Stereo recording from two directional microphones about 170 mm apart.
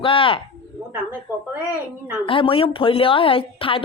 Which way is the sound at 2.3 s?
30° left (ahead or behind).